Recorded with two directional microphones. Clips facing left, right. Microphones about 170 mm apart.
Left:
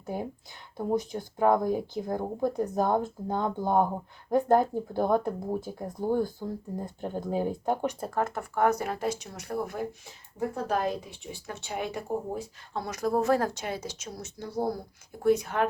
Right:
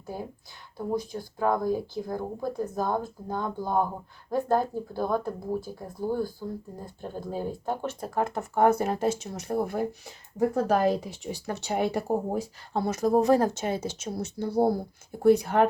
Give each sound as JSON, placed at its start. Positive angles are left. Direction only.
{"t": 0.0, "sound": "speech", "side_deg": 20}
{"t": 8.1, "sound": "speech", "side_deg": -15}
{"t": 10.3, "sound": "speech", "side_deg": -40}